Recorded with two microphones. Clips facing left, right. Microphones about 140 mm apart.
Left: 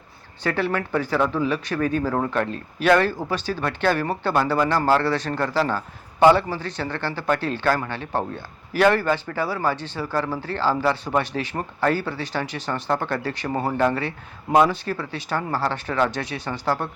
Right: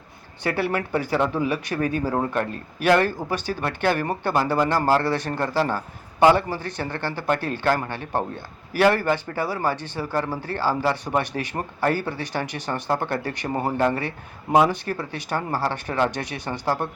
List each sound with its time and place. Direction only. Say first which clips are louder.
0.4 s speech: even; 10° right (ahead or behind)